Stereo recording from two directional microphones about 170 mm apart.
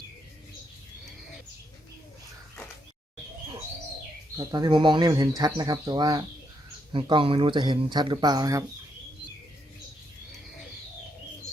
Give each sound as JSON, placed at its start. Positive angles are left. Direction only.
{"t": 4.4, "sound": "speech", "side_deg": -25}